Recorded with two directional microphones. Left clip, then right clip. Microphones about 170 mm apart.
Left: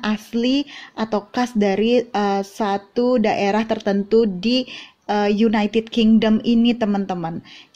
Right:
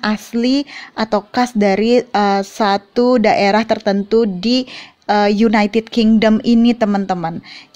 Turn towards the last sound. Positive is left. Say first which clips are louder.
# right 6 dB
turn(degrees=-30)  # may be behind; listen again after turning